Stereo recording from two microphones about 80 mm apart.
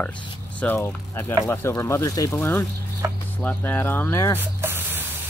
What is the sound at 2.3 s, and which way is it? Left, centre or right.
Speech, left.